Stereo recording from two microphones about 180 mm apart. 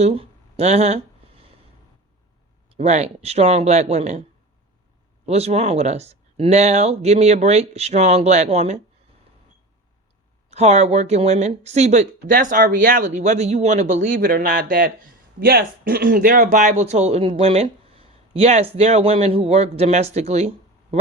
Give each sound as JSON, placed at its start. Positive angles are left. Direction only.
{"t": 0.0, "sound": "a sound", "side_deg": -35}
{"t": 2.7, "sound": "speech", "side_deg": -35}
{"t": 5.2, "sound": "speech", "side_deg": -35}
{"t": 10.5, "sound": "speech", "side_deg": -35}